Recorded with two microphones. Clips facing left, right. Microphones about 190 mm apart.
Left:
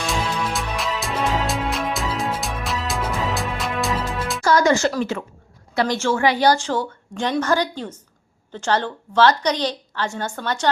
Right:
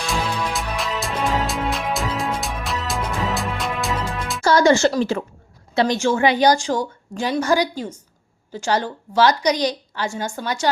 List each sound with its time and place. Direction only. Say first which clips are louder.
0.1 s music: right 2 dB; centre (ahead or behind)
4.4 s a woman's voice: right 2 dB; 30° right (ahead or behind); by 10.7 s 10° right (ahead or behind)